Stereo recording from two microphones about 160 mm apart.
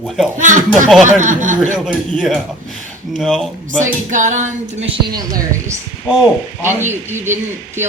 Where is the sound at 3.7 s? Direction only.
50° right (ahead or behind).